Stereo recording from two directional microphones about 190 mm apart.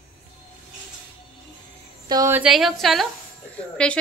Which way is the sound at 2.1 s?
15° right (ahead or behind).